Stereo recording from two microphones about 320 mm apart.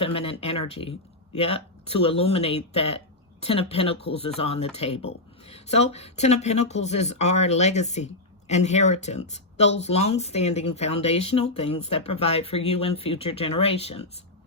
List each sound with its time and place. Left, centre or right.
0.0 s speech: centre